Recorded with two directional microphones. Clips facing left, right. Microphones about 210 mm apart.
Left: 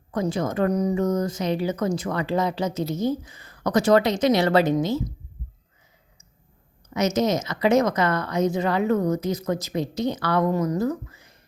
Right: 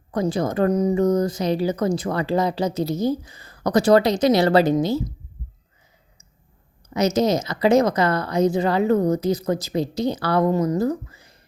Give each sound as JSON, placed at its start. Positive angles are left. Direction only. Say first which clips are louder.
{"t": 0.1, "sound": "speech", "louder": "right 3 dB", "side_deg": -35}
{"t": 6.9, "sound": "speech", "louder": "right 3 dB", "side_deg": -35}